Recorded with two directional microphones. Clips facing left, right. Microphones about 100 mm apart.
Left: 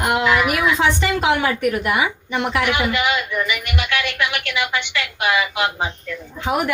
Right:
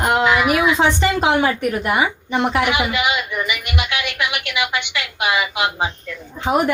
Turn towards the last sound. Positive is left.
turn(degrees=-25)  # may be behind; listen again after turning